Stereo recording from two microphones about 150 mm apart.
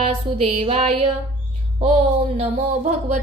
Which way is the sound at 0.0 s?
40° right (ahead or behind).